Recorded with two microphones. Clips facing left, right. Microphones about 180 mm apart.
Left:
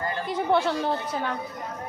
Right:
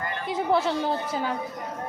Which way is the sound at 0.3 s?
Centre (ahead or behind).